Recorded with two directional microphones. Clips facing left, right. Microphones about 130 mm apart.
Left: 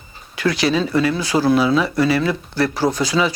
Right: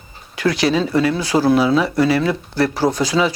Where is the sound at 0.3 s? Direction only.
40° right (ahead or behind).